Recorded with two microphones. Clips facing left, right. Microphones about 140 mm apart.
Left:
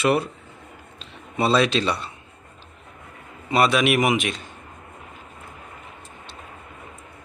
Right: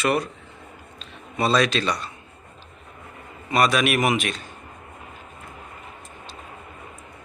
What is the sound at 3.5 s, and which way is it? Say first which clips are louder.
Speech: left 1 dB; 25° left (ahead or behind).